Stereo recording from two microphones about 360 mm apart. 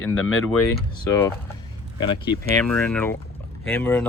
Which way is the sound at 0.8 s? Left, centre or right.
Centre.